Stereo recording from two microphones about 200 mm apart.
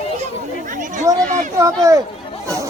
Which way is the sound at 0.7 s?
40° right (ahead or behind).